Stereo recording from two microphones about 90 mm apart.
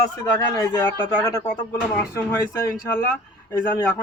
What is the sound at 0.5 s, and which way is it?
Speech, 35° left (ahead or behind).